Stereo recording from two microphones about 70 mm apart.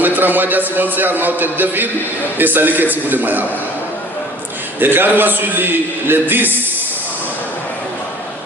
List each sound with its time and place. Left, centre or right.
0.0 s a man's voice: right
4.8 s a man's voice: right